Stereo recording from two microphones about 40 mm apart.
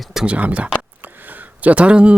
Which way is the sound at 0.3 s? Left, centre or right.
Right.